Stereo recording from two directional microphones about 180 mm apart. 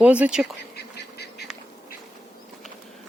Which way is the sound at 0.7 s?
65° left (ahead or behind).